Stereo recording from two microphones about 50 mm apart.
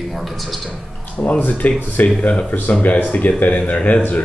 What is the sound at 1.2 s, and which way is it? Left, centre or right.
Speech, left.